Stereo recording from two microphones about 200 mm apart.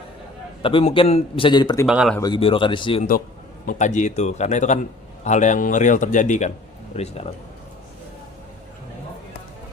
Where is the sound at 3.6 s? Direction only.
35° left (ahead or behind).